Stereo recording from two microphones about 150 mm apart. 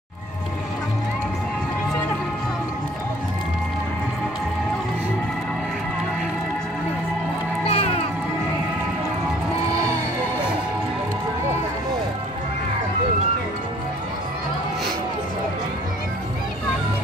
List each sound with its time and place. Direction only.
7.6 s music: 40° left (ahead or behind)